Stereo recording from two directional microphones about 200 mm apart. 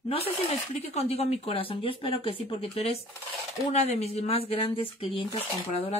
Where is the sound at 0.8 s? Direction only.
30° left (ahead or behind).